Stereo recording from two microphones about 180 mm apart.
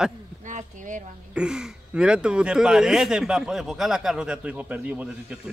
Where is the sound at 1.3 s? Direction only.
5° right (ahead or behind).